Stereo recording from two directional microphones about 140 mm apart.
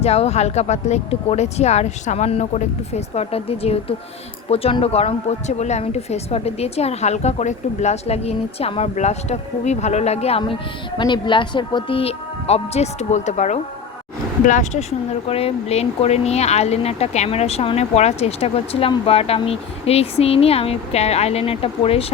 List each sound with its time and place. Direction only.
0.0 s speech: 50° left (ahead or behind)
10.4 s speech: 35° left (ahead or behind)